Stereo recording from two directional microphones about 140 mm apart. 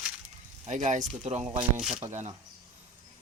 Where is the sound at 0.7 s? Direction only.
60° right (ahead or behind).